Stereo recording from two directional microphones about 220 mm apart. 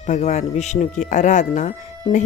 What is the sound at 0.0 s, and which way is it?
A woman's voice, 35° left (ahead or behind).